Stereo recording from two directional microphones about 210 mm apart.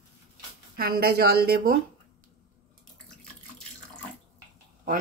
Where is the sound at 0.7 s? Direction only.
45° right (ahead or behind).